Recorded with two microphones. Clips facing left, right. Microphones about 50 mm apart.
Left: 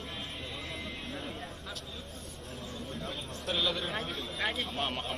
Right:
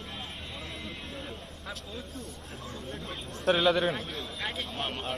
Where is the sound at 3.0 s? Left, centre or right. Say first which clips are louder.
Right 11 dB; right.